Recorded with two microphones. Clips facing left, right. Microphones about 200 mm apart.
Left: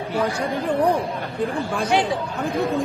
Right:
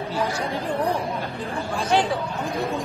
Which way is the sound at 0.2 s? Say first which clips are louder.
Left 3 dB; 55° left (ahead or behind).